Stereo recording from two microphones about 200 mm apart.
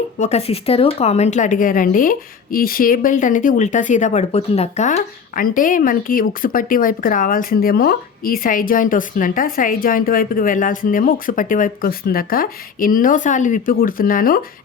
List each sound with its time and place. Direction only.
0.2 s speech: 30° left (ahead or behind)